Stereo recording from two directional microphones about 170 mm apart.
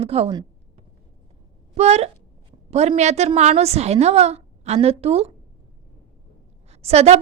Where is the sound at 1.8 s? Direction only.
40° right (ahead or behind).